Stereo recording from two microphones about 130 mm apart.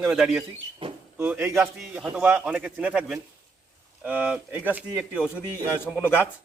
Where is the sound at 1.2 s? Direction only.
15° right (ahead or behind).